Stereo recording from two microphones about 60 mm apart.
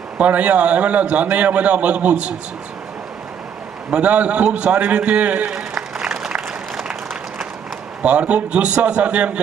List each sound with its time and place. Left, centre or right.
0.2 s a man's voice: right
3.9 s a man's voice: right
5.5 s applause: centre
8.0 s a man's voice: centre